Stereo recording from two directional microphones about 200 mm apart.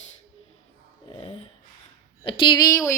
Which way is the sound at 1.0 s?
30° left (ahead or behind).